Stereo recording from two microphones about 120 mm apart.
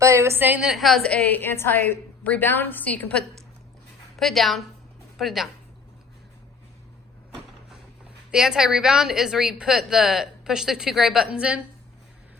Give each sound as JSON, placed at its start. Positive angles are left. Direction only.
{"t": 0.0, "sound": "a woman's voice", "side_deg": -25}
{"t": 0.7, "sound": "a woman's voice", "side_deg": 0}
{"t": 4.2, "sound": "a woman's voice", "side_deg": 0}
{"t": 8.3, "sound": "a woman's voice", "side_deg": -5}